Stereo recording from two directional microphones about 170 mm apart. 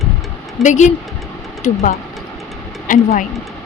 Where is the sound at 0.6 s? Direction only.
45° left (ahead or behind).